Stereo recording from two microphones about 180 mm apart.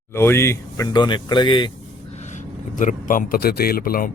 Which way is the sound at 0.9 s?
25° left (ahead or behind).